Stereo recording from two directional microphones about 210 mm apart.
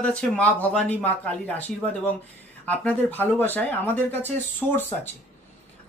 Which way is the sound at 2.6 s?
5° left (ahead or behind).